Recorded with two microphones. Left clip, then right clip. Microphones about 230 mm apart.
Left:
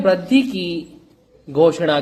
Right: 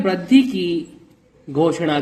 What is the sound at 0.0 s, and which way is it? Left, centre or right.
A man's voice, centre.